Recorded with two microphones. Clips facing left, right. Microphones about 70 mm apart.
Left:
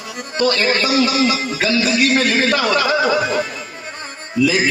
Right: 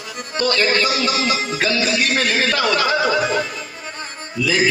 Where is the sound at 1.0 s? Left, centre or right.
Right.